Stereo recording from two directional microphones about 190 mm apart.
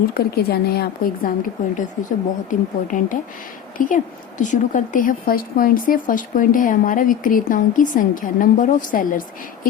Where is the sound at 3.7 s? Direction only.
45° left (ahead or behind).